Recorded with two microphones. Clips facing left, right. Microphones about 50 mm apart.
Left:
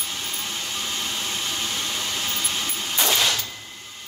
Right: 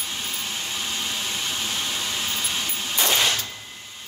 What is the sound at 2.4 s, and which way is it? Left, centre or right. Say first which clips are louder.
Vehicle: even; centre.